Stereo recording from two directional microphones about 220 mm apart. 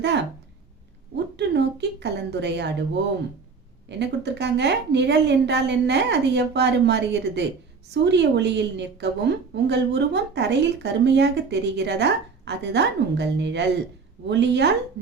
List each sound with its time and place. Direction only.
0.0 s a woman's voice: 50° right (ahead or behind)
3.8 s a woman's voice: 50° right (ahead or behind)